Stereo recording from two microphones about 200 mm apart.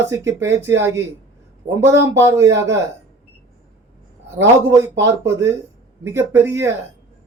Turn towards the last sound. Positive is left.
turn(degrees=-10)  # may be behind; listen again after turning